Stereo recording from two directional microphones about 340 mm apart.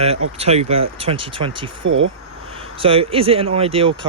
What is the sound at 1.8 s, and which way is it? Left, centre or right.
Speech, right.